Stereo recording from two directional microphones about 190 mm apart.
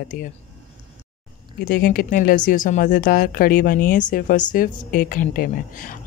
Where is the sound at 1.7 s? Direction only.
50° left (ahead or behind).